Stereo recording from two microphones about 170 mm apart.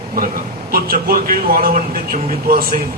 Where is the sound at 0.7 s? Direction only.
60° right (ahead or behind).